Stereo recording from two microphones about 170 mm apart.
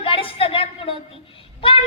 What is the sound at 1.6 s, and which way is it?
Child singing, 30° left (ahead or behind).